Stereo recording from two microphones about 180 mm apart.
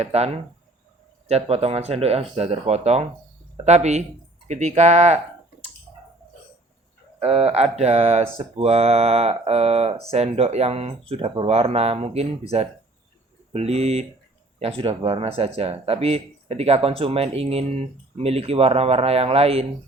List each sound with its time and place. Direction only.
0.0 s speech: 35° right (ahead or behind)
1.3 s speech: 35° right (ahead or behind)
7.2 s speech: 35° right (ahead or behind)